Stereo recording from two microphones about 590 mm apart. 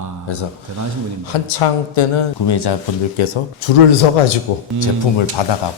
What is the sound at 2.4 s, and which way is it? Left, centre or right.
Speech, left.